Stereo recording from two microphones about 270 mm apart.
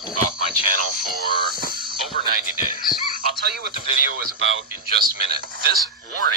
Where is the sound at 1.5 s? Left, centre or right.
Left.